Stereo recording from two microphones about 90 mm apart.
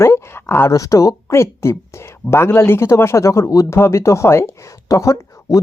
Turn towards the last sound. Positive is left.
turn(degrees=35)  # may be behind; listen again after turning